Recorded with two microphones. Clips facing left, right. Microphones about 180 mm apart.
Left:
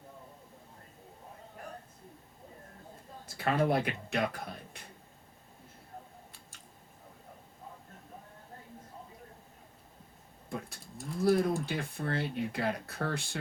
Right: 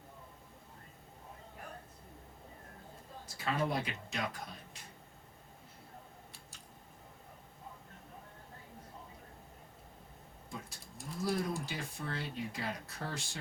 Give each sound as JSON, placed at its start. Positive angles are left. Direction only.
{"t": 3.3, "sound": "speech", "side_deg": 60}
{"t": 10.5, "sound": "a sound", "side_deg": 60}
{"t": 11.2, "sound": "speech", "side_deg": 60}